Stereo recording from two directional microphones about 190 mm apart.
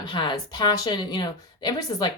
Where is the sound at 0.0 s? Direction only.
25° left (ahead or behind).